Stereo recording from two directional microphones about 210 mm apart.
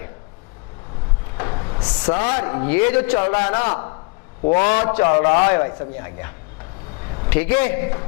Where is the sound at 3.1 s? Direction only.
25° left (ahead or behind).